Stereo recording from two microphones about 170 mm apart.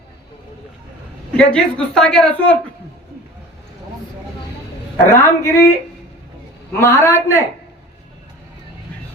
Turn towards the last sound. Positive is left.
turn(degrees=15)  # may be behind; listen again after turning